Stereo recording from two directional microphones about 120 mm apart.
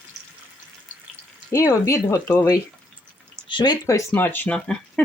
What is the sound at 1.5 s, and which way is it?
Speech, 25° left (ahead or behind).